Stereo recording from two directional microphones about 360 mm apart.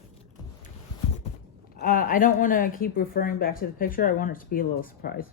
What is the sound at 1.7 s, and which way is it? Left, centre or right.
A woman's voice, left.